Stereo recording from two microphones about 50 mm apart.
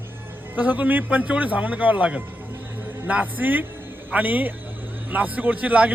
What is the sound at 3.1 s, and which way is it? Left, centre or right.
Speech, right.